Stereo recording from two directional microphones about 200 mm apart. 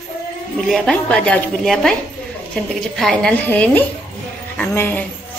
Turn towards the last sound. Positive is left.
turn(degrees=10)  # may be behind; listen again after turning